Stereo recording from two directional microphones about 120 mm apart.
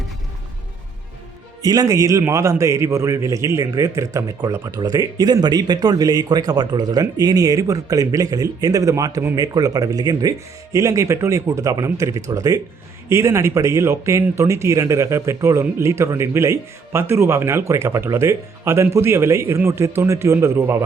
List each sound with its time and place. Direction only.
1.6 s a man's voice: 30° right (ahead or behind)